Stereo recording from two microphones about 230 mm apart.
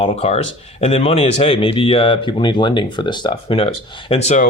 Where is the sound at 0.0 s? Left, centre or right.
Left.